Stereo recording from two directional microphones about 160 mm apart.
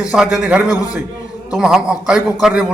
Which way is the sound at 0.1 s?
5° right (ahead or behind).